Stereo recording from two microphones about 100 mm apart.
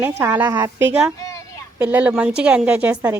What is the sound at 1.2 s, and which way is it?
Children playing, 30° left (ahead or behind).